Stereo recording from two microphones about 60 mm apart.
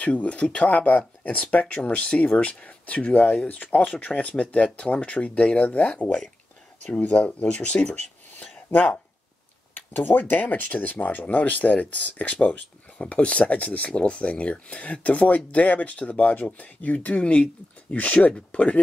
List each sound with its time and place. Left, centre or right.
0.0 s speech: left
9.8 s speech: left